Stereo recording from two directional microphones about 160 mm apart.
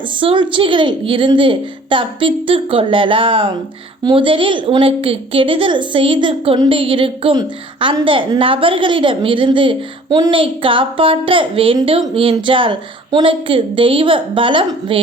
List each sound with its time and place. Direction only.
0.2 s a woman's voice: 30° right (ahead or behind)